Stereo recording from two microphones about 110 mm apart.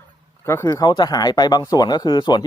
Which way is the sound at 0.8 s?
40° left (ahead or behind).